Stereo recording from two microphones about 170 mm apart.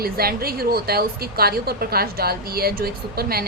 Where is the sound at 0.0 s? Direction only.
65° right (ahead or behind).